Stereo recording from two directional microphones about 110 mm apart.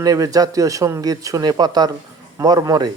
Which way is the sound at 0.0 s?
35° right (ahead or behind).